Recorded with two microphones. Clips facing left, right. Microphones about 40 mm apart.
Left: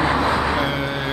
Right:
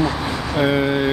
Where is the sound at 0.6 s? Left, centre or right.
Centre.